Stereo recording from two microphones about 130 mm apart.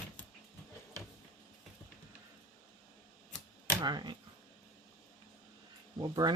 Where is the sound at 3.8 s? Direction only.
35° right (ahead or behind).